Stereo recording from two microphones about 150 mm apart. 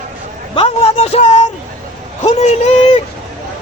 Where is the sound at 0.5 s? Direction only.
40° left (ahead or behind).